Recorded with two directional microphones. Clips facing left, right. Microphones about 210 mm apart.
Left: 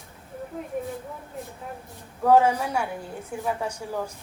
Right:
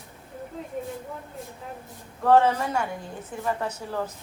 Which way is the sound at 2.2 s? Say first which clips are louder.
Left 1 dB; 10° left (ahead or behind).